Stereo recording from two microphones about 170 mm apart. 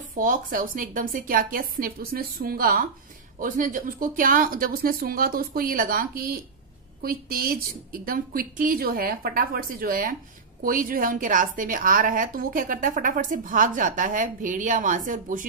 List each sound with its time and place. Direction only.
0.1 s a woman's voice: 55° right (ahead or behind)